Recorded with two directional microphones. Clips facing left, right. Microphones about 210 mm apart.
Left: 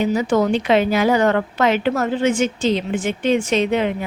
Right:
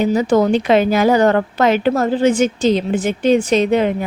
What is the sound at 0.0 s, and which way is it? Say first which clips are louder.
A woman's voice: right 3 dB; 40° right (ahead or behind).